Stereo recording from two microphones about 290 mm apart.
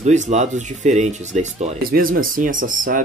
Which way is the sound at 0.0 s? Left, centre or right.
Right.